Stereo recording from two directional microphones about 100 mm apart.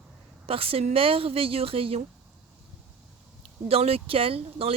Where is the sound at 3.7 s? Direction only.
80° right.